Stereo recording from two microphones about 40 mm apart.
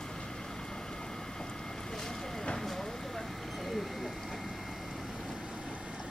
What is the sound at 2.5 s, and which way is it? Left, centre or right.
Vehicle, centre.